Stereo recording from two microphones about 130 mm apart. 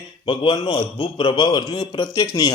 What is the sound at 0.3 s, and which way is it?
A man's voice, 35° left (ahead or behind).